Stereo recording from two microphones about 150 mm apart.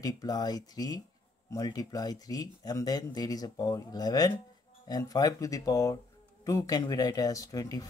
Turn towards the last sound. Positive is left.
turn(degrees=25)  # may be behind; listen again after turning